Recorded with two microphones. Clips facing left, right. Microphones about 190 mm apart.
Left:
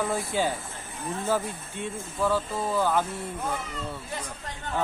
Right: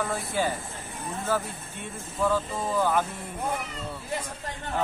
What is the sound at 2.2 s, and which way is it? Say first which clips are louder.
Speech: even; 5° left (ahead or behind).